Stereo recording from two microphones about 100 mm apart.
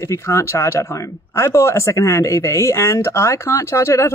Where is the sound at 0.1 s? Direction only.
30° left (ahead or behind).